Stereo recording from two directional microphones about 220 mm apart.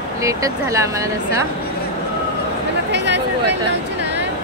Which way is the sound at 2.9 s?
50° right (ahead or behind).